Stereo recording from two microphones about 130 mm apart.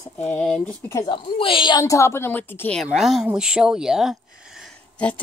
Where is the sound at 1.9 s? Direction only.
20° left (ahead or behind).